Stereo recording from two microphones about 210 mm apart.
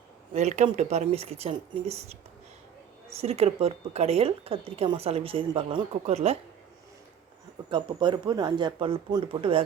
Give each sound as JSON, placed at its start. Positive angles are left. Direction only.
{"t": 0.3, "sound": "speech", "side_deg": -30}
{"t": 3.2, "sound": "speech", "side_deg": -30}
{"t": 7.7, "sound": "speech", "side_deg": -20}